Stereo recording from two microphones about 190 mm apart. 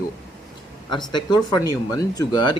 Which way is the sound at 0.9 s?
25° left (ahead or behind).